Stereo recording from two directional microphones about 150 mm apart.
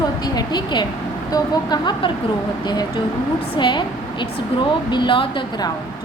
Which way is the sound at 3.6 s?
30° left (ahead or behind).